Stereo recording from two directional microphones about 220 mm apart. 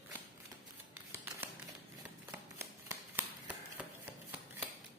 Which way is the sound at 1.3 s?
10° right (ahead or behind).